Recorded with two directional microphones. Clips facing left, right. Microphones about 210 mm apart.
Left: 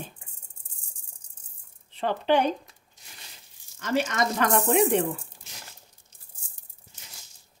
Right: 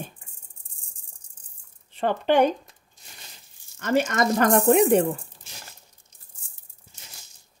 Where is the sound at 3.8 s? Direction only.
50° right (ahead or behind).